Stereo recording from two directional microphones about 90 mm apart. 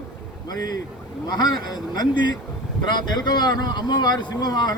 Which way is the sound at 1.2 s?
50° left (ahead or behind).